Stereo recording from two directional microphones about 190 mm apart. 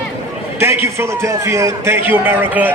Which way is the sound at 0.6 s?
15° right (ahead or behind).